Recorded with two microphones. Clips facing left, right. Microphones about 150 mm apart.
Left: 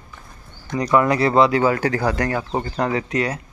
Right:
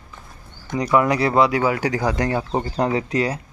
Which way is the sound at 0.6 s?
10° right (ahead or behind).